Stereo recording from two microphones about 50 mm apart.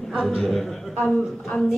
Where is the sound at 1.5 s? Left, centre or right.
Left.